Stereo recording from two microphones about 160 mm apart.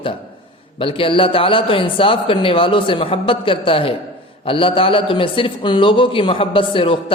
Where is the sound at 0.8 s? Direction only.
35° left (ahead or behind).